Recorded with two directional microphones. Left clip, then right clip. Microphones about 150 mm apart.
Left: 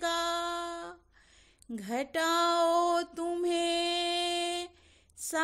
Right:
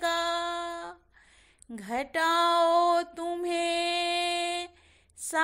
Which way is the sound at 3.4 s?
25° left (ahead or behind).